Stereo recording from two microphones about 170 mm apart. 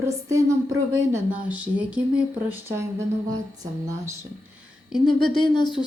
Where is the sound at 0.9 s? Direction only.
15° right (ahead or behind).